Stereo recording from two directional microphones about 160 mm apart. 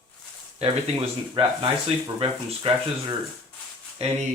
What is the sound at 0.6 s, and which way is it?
Speech, 40° right (ahead or behind).